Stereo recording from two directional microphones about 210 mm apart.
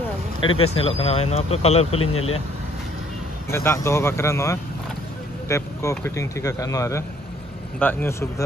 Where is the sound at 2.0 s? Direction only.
90° left.